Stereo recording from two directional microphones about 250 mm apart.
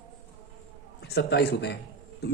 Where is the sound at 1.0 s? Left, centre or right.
Left.